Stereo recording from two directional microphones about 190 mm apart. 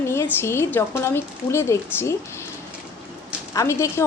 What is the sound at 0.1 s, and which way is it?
A woman's voice, 15° left (ahead or behind).